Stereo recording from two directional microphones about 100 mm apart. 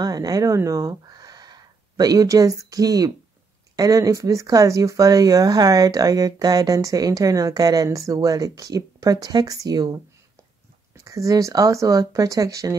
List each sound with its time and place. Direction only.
0.0 s speech: 40° right (ahead or behind)
11.1 s speech: 35° right (ahead or behind)